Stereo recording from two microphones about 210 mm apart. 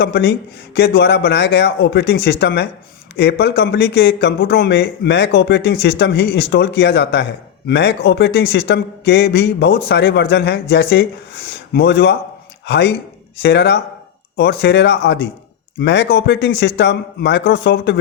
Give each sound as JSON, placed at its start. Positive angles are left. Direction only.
{"t": 0.0, "sound": "a man's voice", "side_deg": 50}